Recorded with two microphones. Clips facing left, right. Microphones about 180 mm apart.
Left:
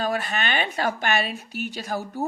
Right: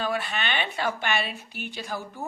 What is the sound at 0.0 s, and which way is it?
Speech, 40° left (ahead or behind).